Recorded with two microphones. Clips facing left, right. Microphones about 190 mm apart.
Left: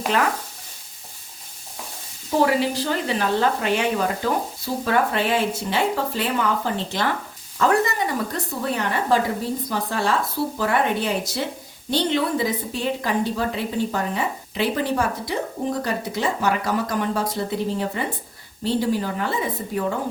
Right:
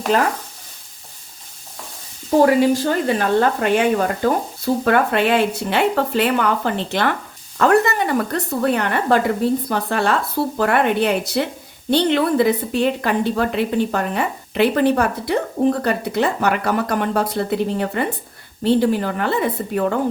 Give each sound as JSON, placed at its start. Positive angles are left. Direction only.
{"t": 0.1, "sound": "stir", "side_deg": -40}
{"t": 2.4, "sound": "speech", "side_deg": -45}